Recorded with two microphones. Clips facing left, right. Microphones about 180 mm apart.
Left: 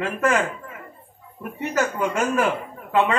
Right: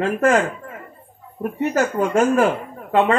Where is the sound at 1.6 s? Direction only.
50° right (ahead or behind).